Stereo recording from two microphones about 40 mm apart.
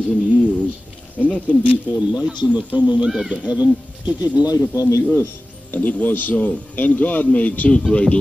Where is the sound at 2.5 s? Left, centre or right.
Right.